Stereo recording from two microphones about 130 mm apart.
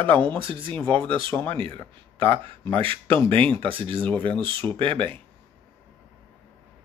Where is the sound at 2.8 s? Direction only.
45° right (ahead or behind).